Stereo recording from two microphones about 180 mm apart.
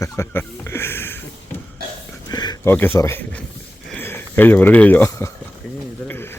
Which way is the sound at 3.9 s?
10° left (ahead or behind).